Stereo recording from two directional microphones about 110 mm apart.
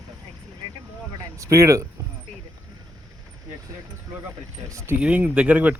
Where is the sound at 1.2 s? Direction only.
30° right (ahead or behind).